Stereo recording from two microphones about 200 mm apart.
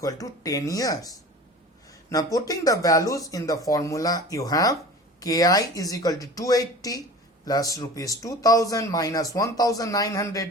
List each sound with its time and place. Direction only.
0.0 s a man's voice: 15° left (ahead or behind)